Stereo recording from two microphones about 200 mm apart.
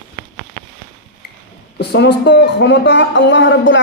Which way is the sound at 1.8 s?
55° left (ahead or behind).